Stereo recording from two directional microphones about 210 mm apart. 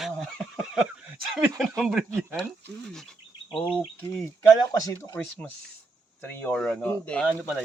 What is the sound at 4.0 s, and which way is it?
Speech, 10° left (ahead or behind).